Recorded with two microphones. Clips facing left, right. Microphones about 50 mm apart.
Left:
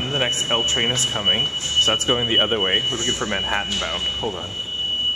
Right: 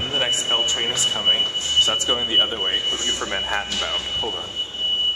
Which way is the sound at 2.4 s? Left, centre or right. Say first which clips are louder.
Left 2 dB; left.